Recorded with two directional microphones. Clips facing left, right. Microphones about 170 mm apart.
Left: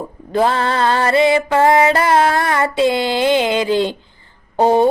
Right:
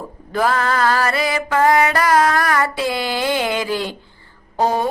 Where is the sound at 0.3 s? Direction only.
25° left (ahead or behind).